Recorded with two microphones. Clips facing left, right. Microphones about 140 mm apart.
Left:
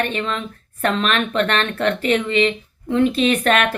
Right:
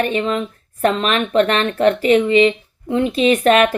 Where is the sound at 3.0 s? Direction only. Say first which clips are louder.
Right 1 dB; 20° right (ahead or behind).